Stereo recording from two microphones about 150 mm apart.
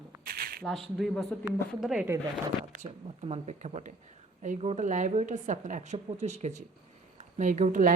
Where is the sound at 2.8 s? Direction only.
45° right (ahead or behind).